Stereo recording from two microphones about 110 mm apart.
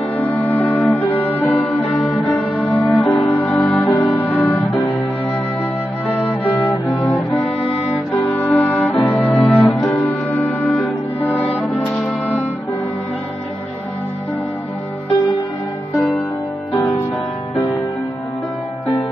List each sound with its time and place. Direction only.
0.2 s music: 10° left (ahead or behind)
0.7 s music: 5° left (ahead or behind)
4.6 s organ: centre (ahead or behind)
6.9 s cello: centre (ahead or behind)
7.9 s music: centre (ahead or behind)
10.3 s music: 15° left (ahead or behind)
10.6 s music: centre (ahead or behind)
16.0 s music: 5° left (ahead or behind)